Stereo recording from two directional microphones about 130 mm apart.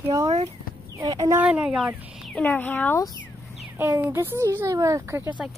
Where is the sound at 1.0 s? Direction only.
25° right (ahead or behind).